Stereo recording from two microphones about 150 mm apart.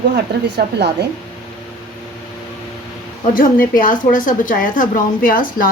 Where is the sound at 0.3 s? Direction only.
90° right.